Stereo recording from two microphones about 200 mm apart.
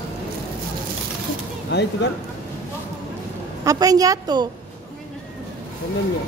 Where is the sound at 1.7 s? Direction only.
60° left (ahead or behind).